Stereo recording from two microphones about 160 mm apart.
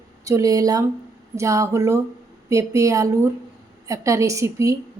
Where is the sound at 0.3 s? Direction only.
20° right (ahead or behind).